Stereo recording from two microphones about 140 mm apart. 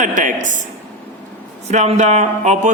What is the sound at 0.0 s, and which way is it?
Speech, 65° right (ahead or behind).